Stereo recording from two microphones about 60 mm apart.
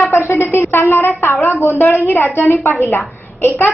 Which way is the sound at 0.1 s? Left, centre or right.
Left.